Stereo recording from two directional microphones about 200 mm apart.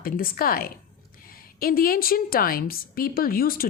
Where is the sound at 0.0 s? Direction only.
45° left (ahead or behind).